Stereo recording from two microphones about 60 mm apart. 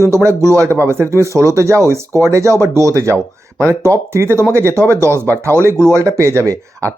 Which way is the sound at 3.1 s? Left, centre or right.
Left.